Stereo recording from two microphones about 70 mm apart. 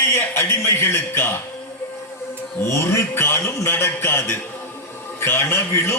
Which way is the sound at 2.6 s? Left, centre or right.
Left.